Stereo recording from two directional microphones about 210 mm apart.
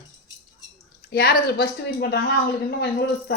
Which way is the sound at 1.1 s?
50° left (ahead or behind).